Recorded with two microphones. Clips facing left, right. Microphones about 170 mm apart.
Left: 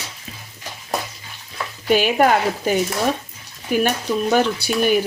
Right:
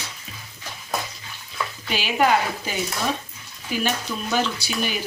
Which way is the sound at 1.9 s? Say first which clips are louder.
Left 5 dB; 50° left (ahead or behind).